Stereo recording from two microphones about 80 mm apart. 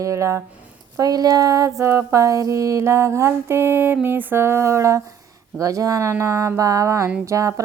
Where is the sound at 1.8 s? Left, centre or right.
Right.